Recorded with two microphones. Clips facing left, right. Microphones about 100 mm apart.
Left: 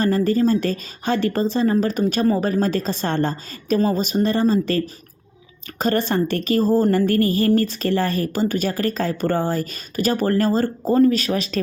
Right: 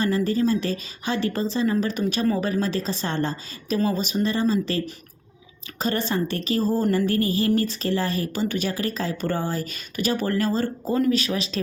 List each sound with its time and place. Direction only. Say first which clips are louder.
0.0 s a woman's voice: left 4 dB; 45° left (ahead or behind)
2.2 s speech: left 4 dB; 30° left (ahead or behind)
2.5 s a woman's voice: left 4 dB; 50° left (ahead or behind)
5.8 s a woman's voice: left 5 dB; 50° left (ahead or behind)